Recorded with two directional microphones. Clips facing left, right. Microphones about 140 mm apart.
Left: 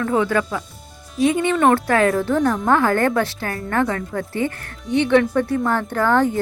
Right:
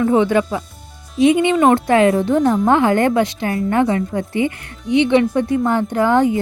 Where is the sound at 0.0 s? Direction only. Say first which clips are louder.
Right 5 dB; 20° right (ahead or behind).